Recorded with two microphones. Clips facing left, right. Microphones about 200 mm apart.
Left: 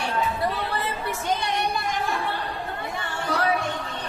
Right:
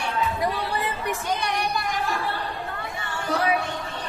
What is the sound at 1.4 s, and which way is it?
Speech, 20° left (ahead or behind).